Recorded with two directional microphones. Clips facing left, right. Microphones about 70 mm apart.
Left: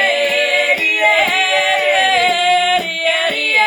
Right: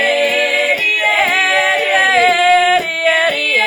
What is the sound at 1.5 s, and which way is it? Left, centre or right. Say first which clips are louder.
A capella: right 1 dB; right.